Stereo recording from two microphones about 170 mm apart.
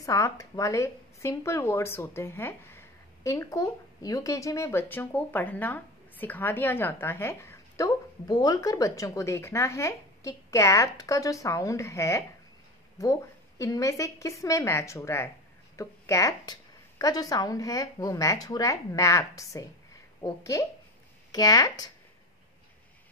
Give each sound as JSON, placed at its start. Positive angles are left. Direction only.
{"t": 0.0, "sound": "a woman's voice", "side_deg": 20}